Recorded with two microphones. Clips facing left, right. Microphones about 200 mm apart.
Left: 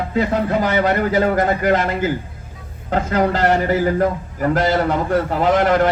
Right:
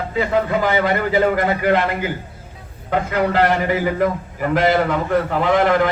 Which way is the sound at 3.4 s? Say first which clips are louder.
Left 2 dB; 40° left (ahead or behind).